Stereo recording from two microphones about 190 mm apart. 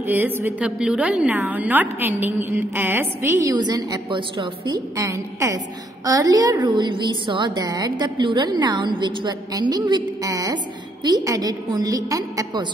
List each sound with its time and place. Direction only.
0.0 s a woman's voice: 10° right (ahead or behind)